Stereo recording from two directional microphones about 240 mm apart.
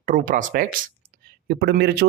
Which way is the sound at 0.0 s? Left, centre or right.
Right.